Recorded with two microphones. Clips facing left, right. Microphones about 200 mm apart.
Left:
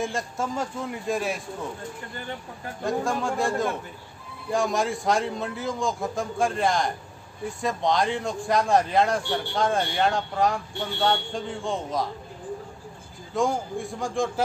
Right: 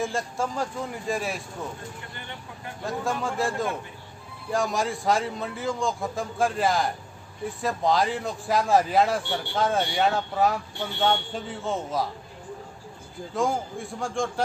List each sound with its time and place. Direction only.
0.0 s a man's voice: centre (ahead or behind)
2.1 s speech: 40° left (ahead or behind)
2.8 s a man's voice: centre (ahead or behind)
13.3 s a man's voice: centre (ahead or behind)